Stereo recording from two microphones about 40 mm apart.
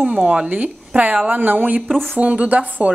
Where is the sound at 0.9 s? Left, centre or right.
Right.